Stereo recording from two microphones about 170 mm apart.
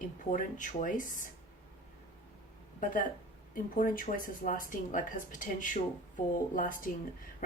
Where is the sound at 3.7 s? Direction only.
55° left (ahead or behind).